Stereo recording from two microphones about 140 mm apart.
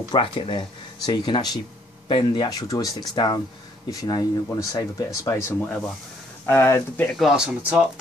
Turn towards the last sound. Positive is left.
turn(degrees=-5)  # may be behind; listen again after turning